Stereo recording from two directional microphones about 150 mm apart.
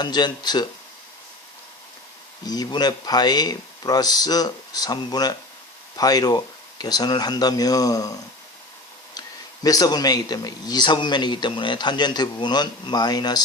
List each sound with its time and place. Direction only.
0.0 s a man's voice: 30° left (ahead or behind)
2.4 s a man's voice: 25° left (ahead or behind)
9.6 s a man's voice: 25° left (ahead or behind)